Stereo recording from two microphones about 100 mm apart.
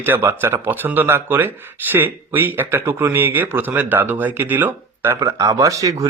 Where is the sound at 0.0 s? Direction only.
20° right (ahead or behind).